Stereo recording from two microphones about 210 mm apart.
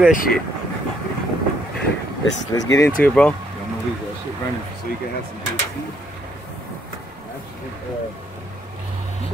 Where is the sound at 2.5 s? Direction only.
15° left (ahead or behind).